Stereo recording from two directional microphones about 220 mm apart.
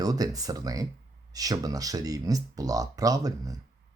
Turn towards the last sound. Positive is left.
turn(degrees=-15)  # may be behind; listen again after turning